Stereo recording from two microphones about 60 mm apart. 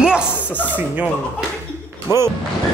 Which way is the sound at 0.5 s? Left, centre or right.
Left.